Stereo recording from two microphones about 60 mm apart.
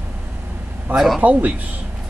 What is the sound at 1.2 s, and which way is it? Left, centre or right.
Speech, right.